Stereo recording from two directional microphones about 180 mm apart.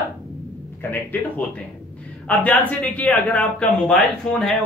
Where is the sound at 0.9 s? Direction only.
10° left (ahead or behind).